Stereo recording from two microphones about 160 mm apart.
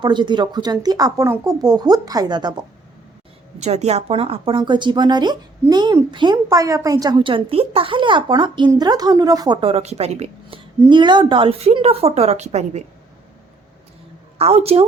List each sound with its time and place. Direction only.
0.0 s speech: 30° right (ahead or behind)
3.6 s speech: 45° right (ahead or behind)
10.8 s a woman's voice: 30° right (ahead or behind); by 12.8 s 45° right (ahead or behind)
14.3 s a woman's voice: 40° right (ahead or behind)